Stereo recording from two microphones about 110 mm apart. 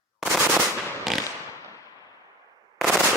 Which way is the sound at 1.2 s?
30° left (ahead or behind).